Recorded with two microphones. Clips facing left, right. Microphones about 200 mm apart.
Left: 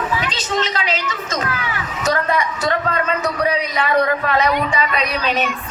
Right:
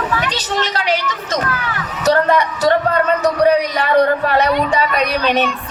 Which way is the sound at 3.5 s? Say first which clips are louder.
Right 4 dB; 65° right (ahead or behind).